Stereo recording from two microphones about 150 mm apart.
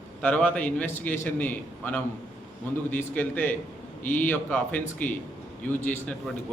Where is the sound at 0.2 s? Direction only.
10° left (ahead or behind).